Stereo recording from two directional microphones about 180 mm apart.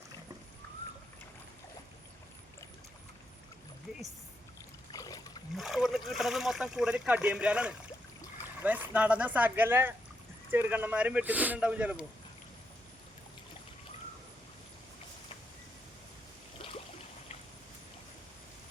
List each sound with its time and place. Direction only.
4.9 s boat: 20° left (ahead or behind)
5.5 s speech: centre (ahead or behind)